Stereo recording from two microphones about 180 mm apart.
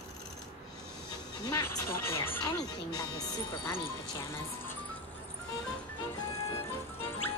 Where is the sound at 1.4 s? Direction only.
20° left (ahead or behind).